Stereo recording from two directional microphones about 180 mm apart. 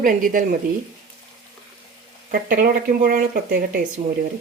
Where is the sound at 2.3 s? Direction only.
50° right (ahead or behind).